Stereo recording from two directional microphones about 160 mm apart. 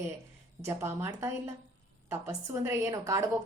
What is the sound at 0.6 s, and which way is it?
A woman's voice, 15° right (ahead or behind).